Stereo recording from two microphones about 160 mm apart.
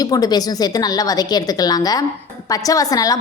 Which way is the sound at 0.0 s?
25° left (ahead or behind).